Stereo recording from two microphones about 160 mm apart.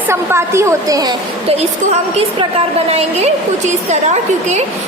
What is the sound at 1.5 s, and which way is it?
A woman's voice, 40° right (ahead or behind).